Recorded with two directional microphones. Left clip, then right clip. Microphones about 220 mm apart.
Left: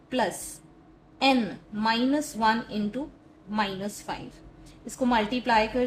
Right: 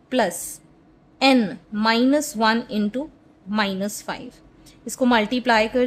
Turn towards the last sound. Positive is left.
turn(degrees=-45)  # may be behind; listen again after turning